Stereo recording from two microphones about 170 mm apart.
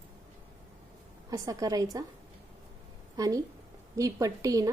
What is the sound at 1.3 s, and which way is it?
Speech, 20° right (ahead or behind).